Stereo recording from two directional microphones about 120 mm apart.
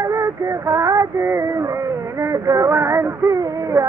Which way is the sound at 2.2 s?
30° right (ahead or behind).